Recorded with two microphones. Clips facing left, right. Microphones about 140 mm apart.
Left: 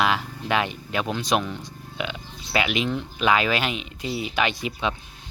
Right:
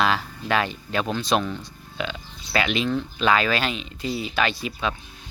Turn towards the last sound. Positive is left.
turn(degrees=20)  # may be behind; listen again after turning